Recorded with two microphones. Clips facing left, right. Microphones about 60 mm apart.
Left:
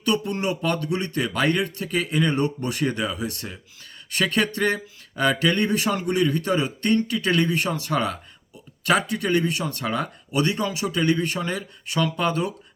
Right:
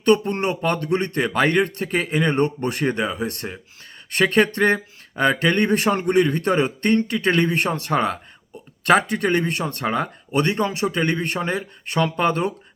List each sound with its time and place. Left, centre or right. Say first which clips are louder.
0.0 s speech: right 6 dB; right